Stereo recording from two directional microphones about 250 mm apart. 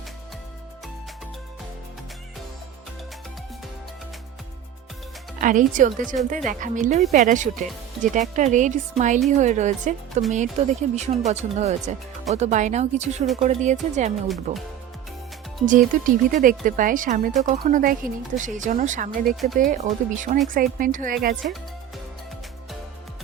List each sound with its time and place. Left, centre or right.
5.4 s speech: right
15.6 s speech: right